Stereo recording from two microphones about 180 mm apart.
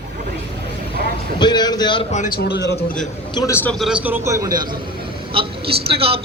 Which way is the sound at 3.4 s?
15° left (ahead or behind).